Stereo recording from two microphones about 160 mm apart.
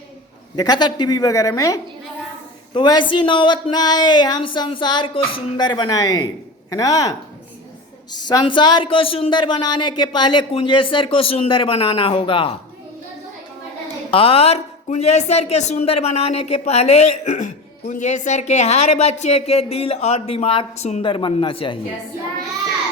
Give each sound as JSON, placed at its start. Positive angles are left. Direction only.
{"t": 0.5, "sound": "speech", "side_deg": 25}
{"t": 14.1, "sound": "speech", "side_deg": 35}